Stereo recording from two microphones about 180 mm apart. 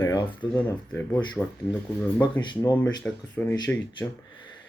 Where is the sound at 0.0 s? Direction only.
20° left (ahead or behind).